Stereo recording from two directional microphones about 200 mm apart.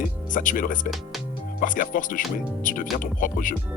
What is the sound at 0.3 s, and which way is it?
Speech, 40° left (ahead or behind).